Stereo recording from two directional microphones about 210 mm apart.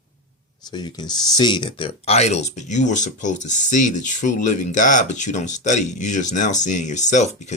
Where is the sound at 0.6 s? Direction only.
20° left (ahead or behind).